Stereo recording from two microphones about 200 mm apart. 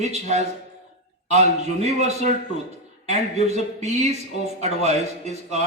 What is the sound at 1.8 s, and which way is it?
Speech, 35° right (ahead or behind).